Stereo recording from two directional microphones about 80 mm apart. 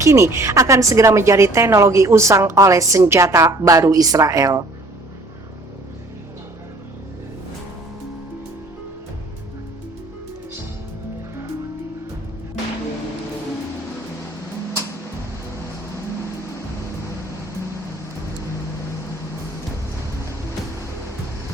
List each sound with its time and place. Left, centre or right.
0.0 s speech: right